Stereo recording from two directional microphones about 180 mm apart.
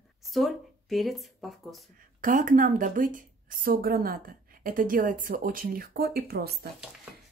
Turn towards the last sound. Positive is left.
turn(degrees=-60)  # may be behind; listen again after turning